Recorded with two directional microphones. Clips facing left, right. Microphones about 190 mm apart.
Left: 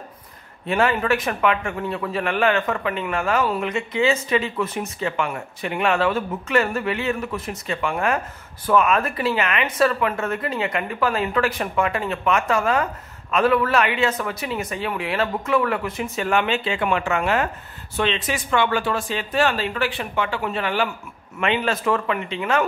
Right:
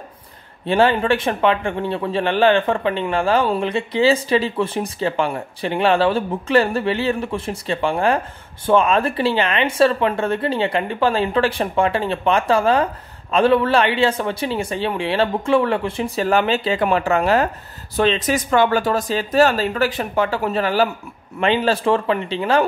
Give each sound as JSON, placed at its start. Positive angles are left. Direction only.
{"t": 0.7, "sound": "a man's voice", "side_deg": -30}